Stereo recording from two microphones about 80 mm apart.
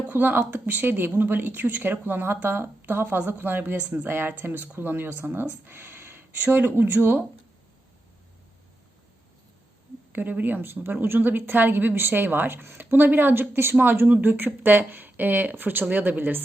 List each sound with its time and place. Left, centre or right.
0.1 s speech: right
10.1 s speech: right